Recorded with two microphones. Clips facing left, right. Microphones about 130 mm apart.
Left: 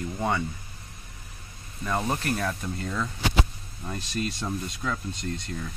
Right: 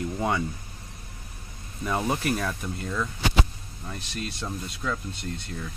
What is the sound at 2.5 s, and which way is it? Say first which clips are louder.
Speech: even; 5° left (ahead or behind).